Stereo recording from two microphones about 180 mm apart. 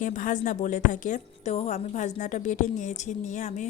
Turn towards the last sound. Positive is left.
turn(degrees=40)  # may be behind; listen again after turning